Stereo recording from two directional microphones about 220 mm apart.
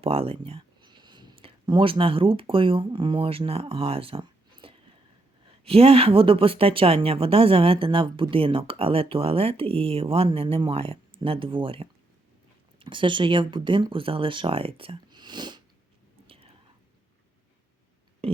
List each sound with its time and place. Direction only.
0.0 s speech: 25° right (ahead or behind)
16.2 s whispering: 25° right (ahead or behind)